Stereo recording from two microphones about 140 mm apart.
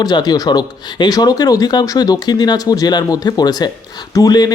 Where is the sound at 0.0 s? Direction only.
30° left (ahead or behind).